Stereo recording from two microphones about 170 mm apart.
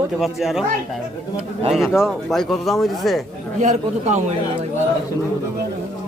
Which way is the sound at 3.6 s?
45° right (ahead or behind).